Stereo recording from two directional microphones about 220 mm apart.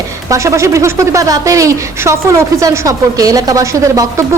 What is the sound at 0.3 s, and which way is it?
Speech, 15° right (ahead or behind).